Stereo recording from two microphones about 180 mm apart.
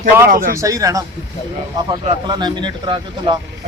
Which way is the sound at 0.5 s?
20° right (ahead or behind).